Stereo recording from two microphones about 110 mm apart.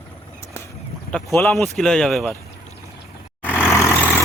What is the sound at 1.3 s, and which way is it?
Speech, 20° left (ahead or behind).